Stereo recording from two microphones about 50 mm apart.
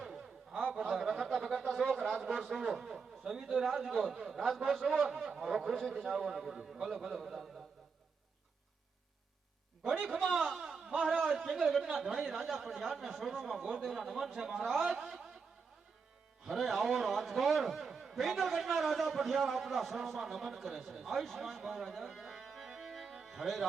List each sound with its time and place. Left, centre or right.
0.0 s a sound: centre
2.1 s a sound: right
2.6 s a man's voice: centre
10.1 s a man's voice: centre
16.5 s a man's voice: centre
23.0 s music: centre
23.3 s speech: centre